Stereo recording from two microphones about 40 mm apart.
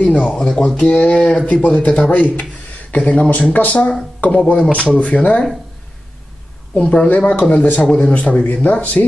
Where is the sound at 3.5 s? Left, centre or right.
Left.